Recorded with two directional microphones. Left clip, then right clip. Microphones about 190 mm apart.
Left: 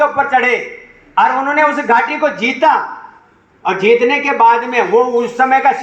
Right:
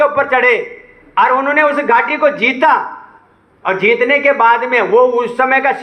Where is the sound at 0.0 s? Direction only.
15° right (ahead or behind).